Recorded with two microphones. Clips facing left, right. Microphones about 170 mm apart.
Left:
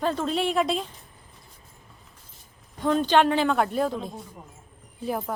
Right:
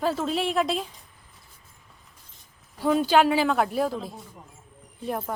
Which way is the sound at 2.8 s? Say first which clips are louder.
Even; 5° right (ahead or behind).